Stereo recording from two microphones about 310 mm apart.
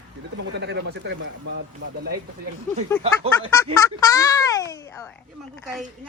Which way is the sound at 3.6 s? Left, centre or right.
Centre.